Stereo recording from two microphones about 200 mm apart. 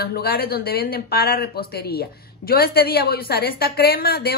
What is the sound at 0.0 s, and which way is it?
Speech, 50° left (ahead or behind).